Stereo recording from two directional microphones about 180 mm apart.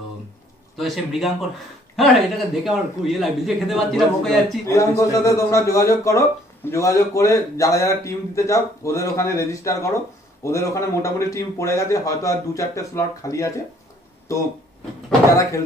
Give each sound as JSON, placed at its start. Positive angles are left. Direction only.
{"t": 0.7, "sound": "a man's voice", "side_deg": 0}
{"t": 4.6, "sound": "a man's voice", "side_deg": 15}